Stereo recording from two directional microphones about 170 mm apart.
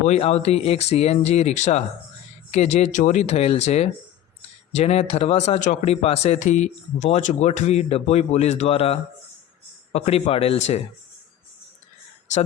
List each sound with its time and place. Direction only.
0.0 s speech: 40° left (ahead or behind)